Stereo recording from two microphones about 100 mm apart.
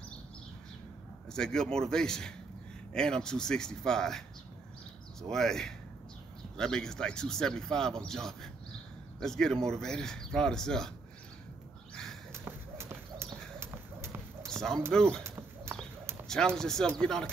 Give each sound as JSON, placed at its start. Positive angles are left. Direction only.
{"t": 1.3, "sound": "speech", "side_deg": 5}
{"t": 5.3, "sound": "speech", "side_deg": 5}
{"t": 11.9, "sound": "a sound", "side_deg": 5}
{"t": 12.3, "sound": "clip-clop", "side_deg": -25}
{"t": 14.9, "sound": "speech", "side_deg": 5}
{"t": 15.2, "sound": "clip-clop", "side_deg": -25}
{"t": 16.3, "sound": "speech", "side_deg": 5}